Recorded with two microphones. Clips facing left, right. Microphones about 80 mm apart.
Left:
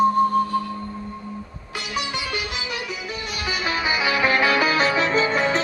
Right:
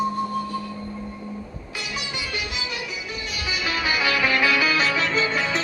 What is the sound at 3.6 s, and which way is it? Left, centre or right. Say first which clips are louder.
Music: left 1 dB; left.